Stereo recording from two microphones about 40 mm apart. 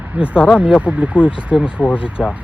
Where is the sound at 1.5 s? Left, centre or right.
Centre.